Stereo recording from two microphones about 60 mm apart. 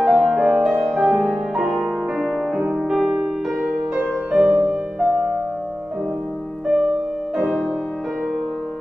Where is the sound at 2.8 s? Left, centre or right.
Centre; by 4.5 s right.